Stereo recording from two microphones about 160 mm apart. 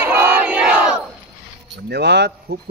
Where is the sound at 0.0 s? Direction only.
15° right (ahead or behind).